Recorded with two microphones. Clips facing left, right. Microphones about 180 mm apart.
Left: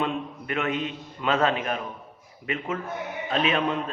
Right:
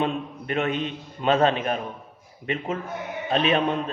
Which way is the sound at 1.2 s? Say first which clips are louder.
Right 3 dB; 30° right (ahead or behind).